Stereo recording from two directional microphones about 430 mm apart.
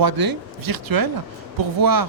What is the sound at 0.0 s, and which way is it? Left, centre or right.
Speech, right.